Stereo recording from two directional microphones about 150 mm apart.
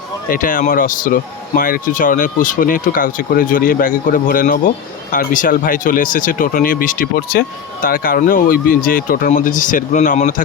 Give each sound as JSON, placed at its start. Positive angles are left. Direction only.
{"t": 0.3, "sound": "speech", "side_deg": 65}